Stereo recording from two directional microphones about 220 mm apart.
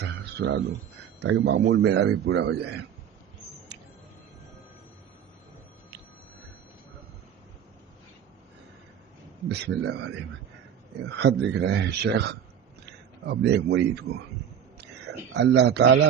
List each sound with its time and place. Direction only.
0.0 s a sound: 50° right (ahead or behind)
1.2 s a man's voice: 50° right (ahead or behind)
3.7 s music: 50° right (ahead or behind)
9.5 s a man's voice: 50° right (ahead or behind)